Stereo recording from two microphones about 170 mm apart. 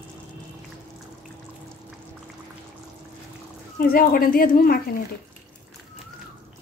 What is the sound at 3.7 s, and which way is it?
Speech, 60° left (ahead or behind).